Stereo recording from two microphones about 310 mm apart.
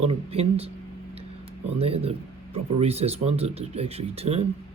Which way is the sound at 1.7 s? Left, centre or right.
Centre.